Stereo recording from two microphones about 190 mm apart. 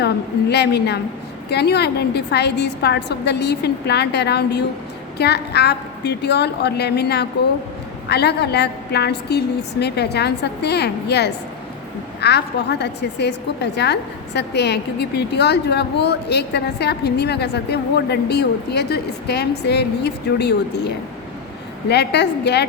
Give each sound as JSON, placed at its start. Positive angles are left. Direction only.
{"t": 0.5, "sound": "a woman's voice", "side_deg": 60}